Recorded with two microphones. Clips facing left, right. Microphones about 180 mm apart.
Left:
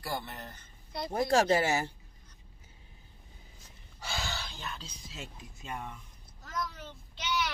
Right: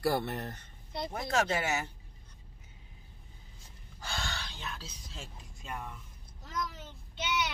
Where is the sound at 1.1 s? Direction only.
30° left (ahead or behind).